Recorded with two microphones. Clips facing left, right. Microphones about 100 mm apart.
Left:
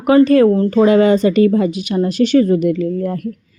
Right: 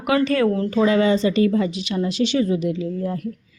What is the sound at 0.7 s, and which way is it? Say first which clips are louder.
Speech: left 5 dB; 50° left (ahead or behind).